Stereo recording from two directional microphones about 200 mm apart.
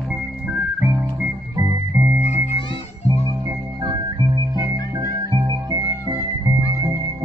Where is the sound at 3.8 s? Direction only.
25° right (ahead or behind).